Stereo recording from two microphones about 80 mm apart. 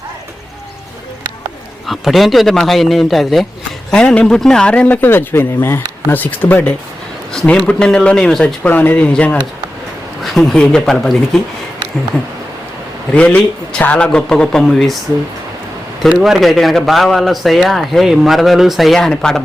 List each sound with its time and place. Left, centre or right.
1.9 s a man's voice: centre
3.9 s speech: centre
4.9 s speech: left; by 8.5 s centre
8.6 s speech: left
10.2 s speech: centre
13.1 s speech: centre
16.2 s a man's voice: centre